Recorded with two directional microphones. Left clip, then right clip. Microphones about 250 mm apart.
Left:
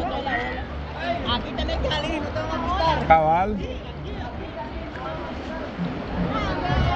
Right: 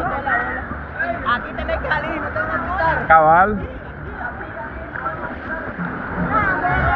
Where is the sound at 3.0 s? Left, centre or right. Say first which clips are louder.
Right 7 dB; centre.